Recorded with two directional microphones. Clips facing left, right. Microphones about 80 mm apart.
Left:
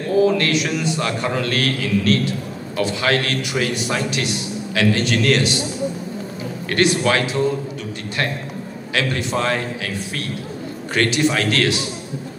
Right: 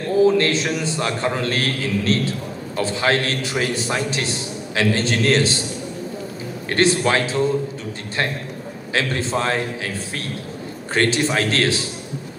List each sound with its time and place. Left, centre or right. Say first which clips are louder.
0.4 s a man's voice: even; right
6.7 s a man's voice: even; right